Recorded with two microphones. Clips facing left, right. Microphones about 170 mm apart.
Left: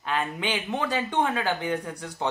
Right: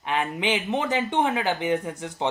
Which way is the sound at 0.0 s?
20° right (ahead or behind).